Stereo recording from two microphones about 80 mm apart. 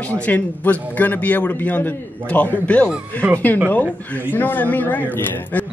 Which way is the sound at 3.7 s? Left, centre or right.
Left.